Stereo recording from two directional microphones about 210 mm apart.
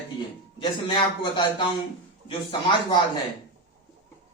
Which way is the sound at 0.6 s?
20° left (ahead or behind).